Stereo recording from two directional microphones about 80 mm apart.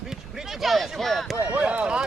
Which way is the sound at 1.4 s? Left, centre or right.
Centre.